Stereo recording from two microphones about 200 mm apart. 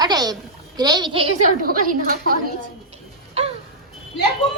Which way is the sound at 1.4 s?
45° right (ahead or behind).